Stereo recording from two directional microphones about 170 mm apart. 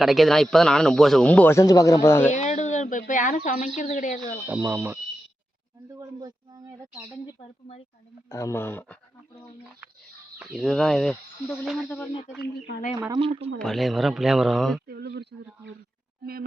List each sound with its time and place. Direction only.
0.0 s speech: centre (ahead or behind)
2.3 s speech: 45° left (ahead or behind)
4.4 s speech: 10° right (ahead or behind)
8.3 s speech: 15° left (ahead or behind)
10.3 s speech: centre (ahead or behind)
13.1 s speech: 30° right (ahead or behind)
13.6 s speech: centre (ahead or behind)
14.8 s speech: 70° right (ahead or behind)
16.2 s speech: 60° right (ahead or behind)